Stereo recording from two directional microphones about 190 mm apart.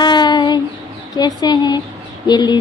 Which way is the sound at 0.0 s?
25° left (ahead or behind).